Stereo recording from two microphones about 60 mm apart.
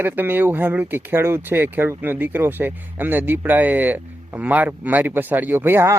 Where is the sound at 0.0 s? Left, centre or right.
Right.